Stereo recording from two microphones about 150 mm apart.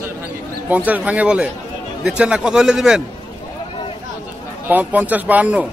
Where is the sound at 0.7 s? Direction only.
10° right (ahead or behind).